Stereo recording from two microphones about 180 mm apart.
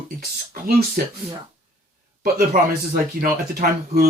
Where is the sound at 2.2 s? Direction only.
50° right (ahead or behind).